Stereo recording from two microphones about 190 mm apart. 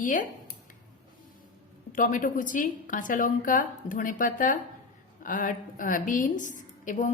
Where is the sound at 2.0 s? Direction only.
45° left (ahead or behind).